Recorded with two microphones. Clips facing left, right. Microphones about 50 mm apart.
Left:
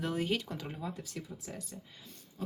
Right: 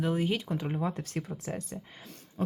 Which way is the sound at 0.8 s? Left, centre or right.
Right.